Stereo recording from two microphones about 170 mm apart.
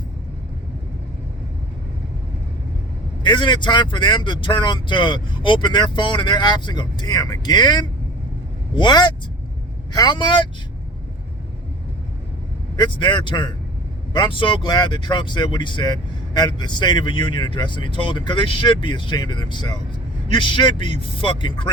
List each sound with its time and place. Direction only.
3.2 s speech: 25° left (ahead or behind)
12.7 s speech: 25° left (ahead or behind)